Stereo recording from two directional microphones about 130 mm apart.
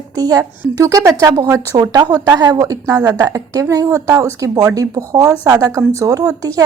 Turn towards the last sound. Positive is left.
turn(degrees=-25)  # may be behind; listen again after turning